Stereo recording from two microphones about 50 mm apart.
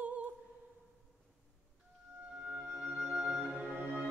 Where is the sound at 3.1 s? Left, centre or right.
Centre.